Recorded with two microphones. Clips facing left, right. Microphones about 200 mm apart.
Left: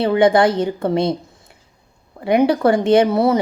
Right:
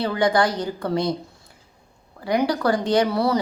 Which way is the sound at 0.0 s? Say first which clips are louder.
Left 7 dB; 25° left (ahead or behind).